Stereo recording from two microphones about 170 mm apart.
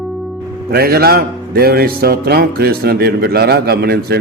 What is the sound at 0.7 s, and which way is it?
A man's voice, 65° right (ahead or behind).